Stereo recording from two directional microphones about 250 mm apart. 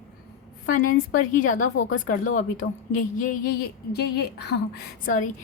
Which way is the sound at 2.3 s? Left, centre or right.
Left.